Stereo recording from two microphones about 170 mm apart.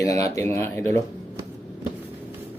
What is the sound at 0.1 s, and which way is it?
Speech, 20° left (ahead or behind).